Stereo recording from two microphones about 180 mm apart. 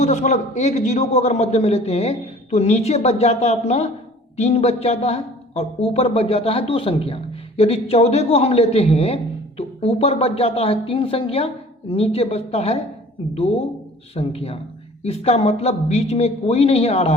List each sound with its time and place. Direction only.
0.0 s speech: 40° left (ahead or behind)